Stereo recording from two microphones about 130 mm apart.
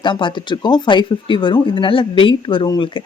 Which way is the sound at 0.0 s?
35° left (ahead or behind).